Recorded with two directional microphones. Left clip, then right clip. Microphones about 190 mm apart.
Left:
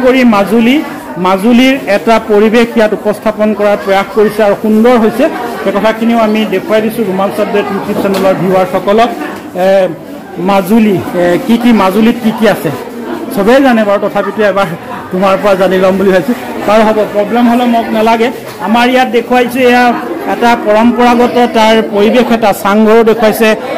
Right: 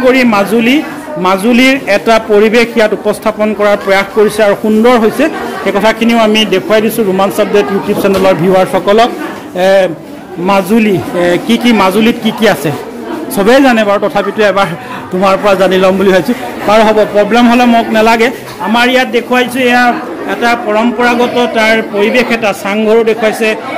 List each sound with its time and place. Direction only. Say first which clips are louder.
0.0 s a man's voice: even; centre (ahead or behind)
5.8 s a man's voice: right 1 dB; 30° right (ahead or behind)
8.5 s a man's voice: right 1 dB; 20° right (ahead or behind)
17.3 s a man's voice: right 2 dB; 30° right (ahead or behind)
18.7 s a man's voice: left 1 dB; centre (ahead or behind); by 23.6 s 30° left (ahead or behind)